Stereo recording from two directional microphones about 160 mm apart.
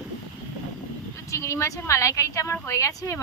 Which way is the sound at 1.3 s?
15° left (ahead or behind).